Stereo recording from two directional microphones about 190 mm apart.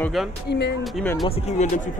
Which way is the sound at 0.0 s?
Centre (ahead or behind).